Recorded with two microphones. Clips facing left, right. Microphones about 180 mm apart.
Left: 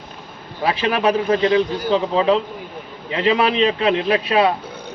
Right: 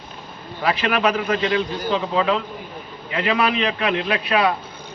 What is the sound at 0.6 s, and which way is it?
A man's voice, 30° left (ahead or behind).